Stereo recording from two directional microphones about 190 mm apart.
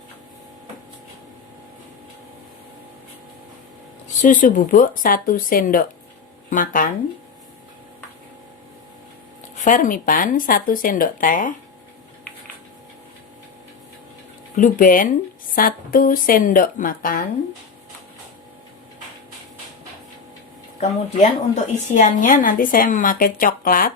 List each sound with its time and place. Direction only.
4.2 s a woman's voice: 45° left (ahead or behind)
9.6 s a woman's voice: 45° left (ahead or behind)
14.5 s a woman's voice: 45° left (ahead or behind)
20.8 s a woman's voice: 40° left (ahead or behind)